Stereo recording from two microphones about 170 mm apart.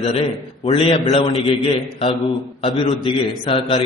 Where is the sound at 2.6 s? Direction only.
25° left (ahead or behind).